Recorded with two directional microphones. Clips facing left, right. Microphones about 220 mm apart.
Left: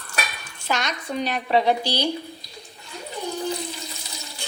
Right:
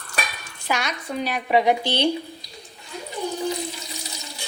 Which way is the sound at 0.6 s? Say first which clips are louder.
Even; 10° right (ahead or behind).